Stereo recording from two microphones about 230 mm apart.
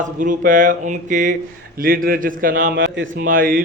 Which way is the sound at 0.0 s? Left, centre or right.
Right.